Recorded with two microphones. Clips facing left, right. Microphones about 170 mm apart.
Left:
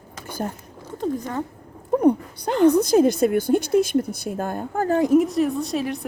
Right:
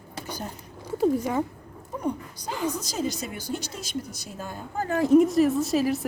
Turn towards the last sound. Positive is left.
turn(degrees=-5)  # may be behind; listen again after turning